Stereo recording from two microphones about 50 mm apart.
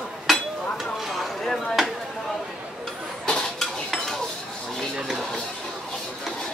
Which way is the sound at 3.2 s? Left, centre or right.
Centre.